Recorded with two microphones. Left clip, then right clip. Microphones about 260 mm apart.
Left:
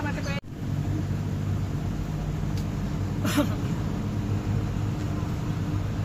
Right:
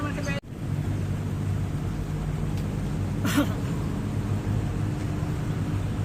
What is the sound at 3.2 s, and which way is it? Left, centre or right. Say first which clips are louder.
Vehicle: even; centre.